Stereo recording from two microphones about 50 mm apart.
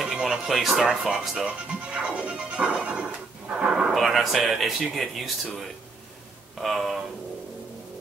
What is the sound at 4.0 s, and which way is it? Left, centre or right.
Speech, centre.